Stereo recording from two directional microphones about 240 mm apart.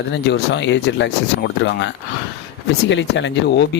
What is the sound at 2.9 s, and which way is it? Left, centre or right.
Speech, left.